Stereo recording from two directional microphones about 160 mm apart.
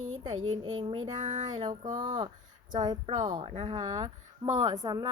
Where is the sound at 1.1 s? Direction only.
50° right (ahead or behind).